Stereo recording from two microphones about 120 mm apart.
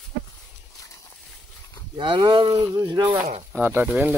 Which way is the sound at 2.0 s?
40° right (ahead or behind).